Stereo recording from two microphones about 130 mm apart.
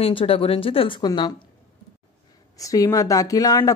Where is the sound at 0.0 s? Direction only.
45° left (ahead or behind).